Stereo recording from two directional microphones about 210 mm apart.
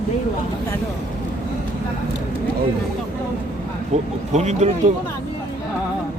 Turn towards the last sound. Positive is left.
turn(degrees=-35)  # may be behind; listen again after turning